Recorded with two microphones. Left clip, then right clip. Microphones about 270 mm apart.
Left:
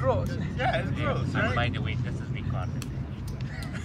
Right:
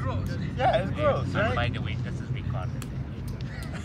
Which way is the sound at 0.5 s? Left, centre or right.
Centre.